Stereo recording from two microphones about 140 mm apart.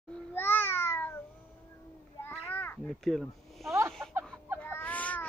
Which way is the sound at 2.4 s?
15° left (ahead or behind).